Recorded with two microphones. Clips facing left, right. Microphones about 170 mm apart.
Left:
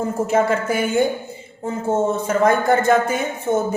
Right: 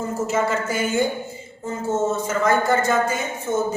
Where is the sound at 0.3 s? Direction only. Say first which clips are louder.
Left 5 dB; 55° left (ahead or behind).